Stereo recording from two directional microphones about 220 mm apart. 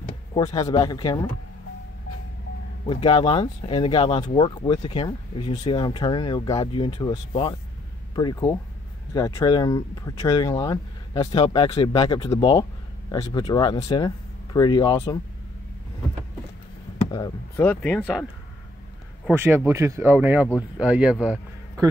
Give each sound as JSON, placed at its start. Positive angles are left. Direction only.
{"t": 0.3, "sound": "speech", "side_deg": 15}
{"t": 2.9, "sound": "speech", "side_deg": 20}
{"t": 17.0, "sound": "a sound", "side_deg": 20}
{"t": 17.6, "sound": "speech", "side_deg": 10}
{"t": 19.2, "sound": "speech", "side_deg": -10}